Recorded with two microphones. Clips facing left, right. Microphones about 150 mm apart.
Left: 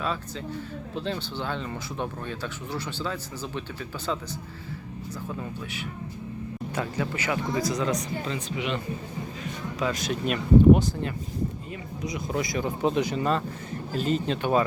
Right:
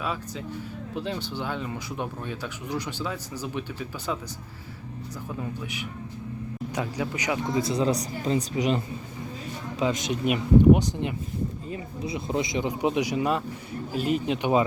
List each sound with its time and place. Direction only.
0.0 s speech: 10° right (ahead or behind)
5.4 s speech: 15° right (ahead or behind); by 8.8 s 40° right (ahead or behind)
9.4 s speech: 25° right (ahead or behind)
11.7 s speech: 30° right (ahead or behind)